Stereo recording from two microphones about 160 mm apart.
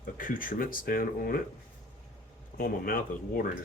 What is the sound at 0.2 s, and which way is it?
Speech, 60° left (ahead or behind).